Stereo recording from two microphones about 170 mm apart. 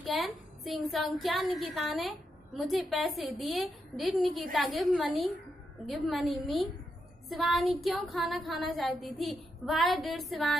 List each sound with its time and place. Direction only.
0.0 s a woman's voice: centre (ahead or behind)